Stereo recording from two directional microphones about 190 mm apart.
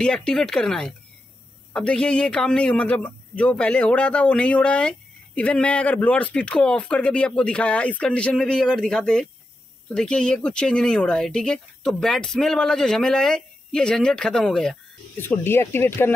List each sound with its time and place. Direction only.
0.0 s a man's voice: 5° left (ahead or behind)